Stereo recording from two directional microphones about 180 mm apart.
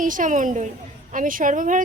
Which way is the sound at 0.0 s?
45° right (ahead or behind).